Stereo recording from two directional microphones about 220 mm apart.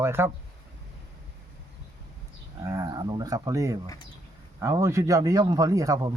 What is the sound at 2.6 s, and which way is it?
Speech, 15° right (ahead or behind).